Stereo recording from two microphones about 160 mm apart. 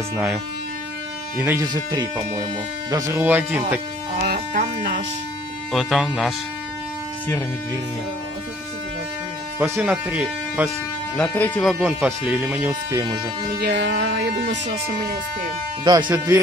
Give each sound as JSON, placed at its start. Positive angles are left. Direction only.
{"t": 1.4, "sound": "speech", "side_deg": -10}
{"t": 1.7, "sound": "speech", "side_deg": -30}
{"t": 4.2, "sound": "speech", "side_deg": -75}
{"t": 5.7, "sound": "speech", "side_deg": 0}
{"t": 9.6, "sound": "speech", "side_deg": -10}
{"t": 11.1, "sound": "speech", "side_deg": 10}
{"t": 11.6, "sound": "speech", "side_deg": -10}
{"t": 13.6, "sound": "speech", "side_deg": -90}
{"t": 15.8, "sound": "speech", "side_deg": -25}